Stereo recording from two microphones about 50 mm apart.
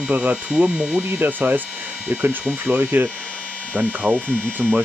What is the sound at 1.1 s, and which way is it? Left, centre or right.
Speech, right.